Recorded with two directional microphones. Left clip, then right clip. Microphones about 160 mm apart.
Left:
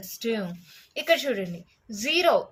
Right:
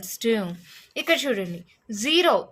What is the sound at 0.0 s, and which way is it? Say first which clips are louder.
A woman's voice: right 5 dB; 50° right (ahead or behind).